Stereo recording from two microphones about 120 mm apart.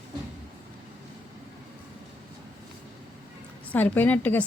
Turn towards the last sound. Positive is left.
turn(degrees=15)  # may be behind; listen again after turning